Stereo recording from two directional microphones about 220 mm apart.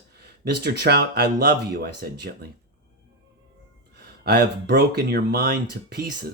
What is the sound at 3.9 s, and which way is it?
Speech, 50° right (ahead or behind).